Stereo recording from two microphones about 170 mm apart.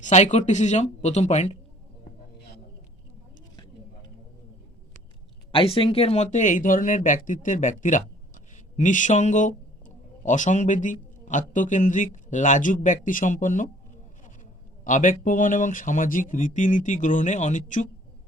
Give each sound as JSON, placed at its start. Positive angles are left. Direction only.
{"t": 0.0, "sound": "speech", "side_deg": 45}
{"t": 5.5, "sound": "speech", "side_deg": 30}
{"t": 14.8, "sound": "speech", "side_deg": 50}